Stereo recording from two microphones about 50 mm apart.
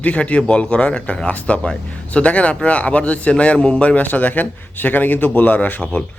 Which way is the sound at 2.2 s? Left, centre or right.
Left.